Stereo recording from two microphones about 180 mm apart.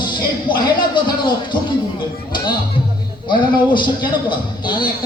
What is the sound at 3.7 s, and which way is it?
A man's voice, 25° left (ahead or behind).